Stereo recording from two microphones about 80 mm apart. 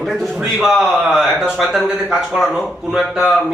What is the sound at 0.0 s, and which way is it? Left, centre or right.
A man's voice, centre.